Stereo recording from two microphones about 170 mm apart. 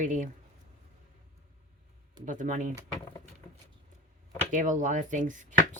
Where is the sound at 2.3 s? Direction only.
50° right (ahead or behind).